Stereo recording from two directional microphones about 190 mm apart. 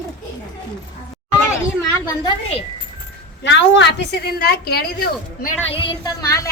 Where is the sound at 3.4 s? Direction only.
65° left (ahead or behind).